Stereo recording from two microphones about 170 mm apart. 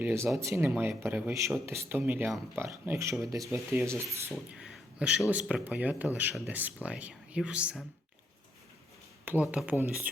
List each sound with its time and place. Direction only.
0.0 s speech: 15° right (ahead or behind)
4.5 s a sound: 5° right (ahead or behind)
5.3 s speech: 10° right (ahead or behind)
9.2 s speech: 10° right (ahead or behind)